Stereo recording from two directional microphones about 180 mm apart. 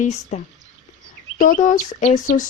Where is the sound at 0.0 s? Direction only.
40° left (ahead or behind).